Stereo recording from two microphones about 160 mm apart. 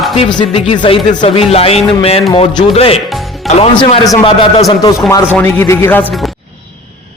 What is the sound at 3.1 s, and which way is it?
Music, centre (ahead or behind).